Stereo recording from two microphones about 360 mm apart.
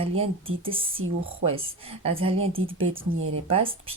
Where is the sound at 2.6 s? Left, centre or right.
Right.